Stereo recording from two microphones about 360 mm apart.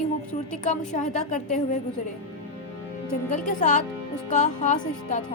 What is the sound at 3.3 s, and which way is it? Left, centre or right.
A woman's voice, left.